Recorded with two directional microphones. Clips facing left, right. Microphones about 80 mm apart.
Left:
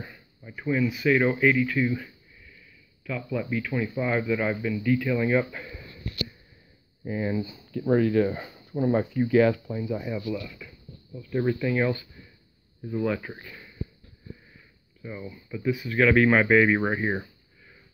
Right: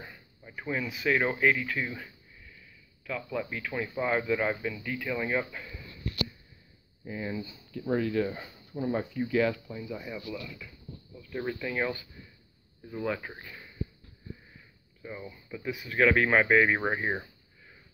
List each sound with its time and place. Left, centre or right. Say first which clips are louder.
0.0 s a sound: left 4 dB; centre
0.6 s speech: left 8 dB; right
3.1 s speech: left 3 dB; right
3.9 s speech: left 1 dB; centre
5.5 s a sound: left 3 dB; left
7.1 s speech: left 7 dB; left
7.8 s speech: left 6 dB; left
9.7 s speech: left 8 dB; left
9.9 s speech: left 7 dB; centre
11.6 s speech: left 3 dB; centre
13.0 s speech: left 4 dB; centre
15.0 s speech: left 3 dB; centre